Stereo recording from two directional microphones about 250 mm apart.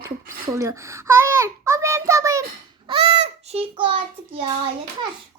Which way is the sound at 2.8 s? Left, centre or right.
Right.